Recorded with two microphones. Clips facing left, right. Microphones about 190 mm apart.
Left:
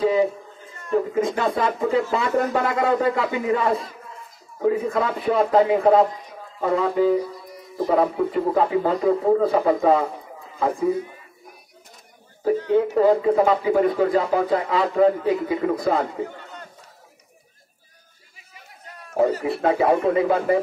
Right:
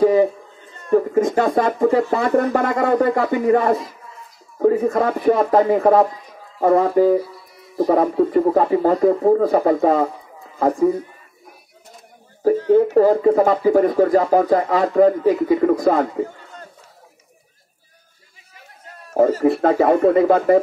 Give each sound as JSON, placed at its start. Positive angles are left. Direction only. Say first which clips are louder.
{"t": 0.0, "sound": "a sound", "louder": "right 5 dB", "side_deg": -50}
{"t": 0.9, "sound": "speech", "louder": "right 5 dB", "side_deg": -50}
{"t": 12.4, "sound": "speech", "louder": "right 5 dB", "side_deg": -40}
{"t": 19.1, "sound": "speech", "louder": "right 5 dB", "side_deg": -45}